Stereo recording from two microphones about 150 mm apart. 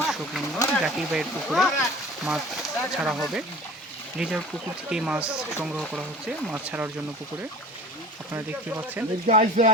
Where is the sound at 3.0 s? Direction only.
Centre (ahead or behind).